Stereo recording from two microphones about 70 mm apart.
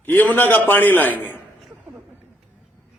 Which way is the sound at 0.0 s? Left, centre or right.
Left.